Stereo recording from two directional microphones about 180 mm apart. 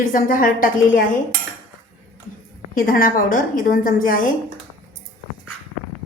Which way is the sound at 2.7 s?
50° left (ahead or behind).